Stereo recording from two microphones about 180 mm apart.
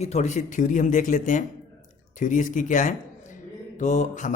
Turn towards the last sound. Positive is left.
turn(degrees=40)  # may be behind; listen again after turning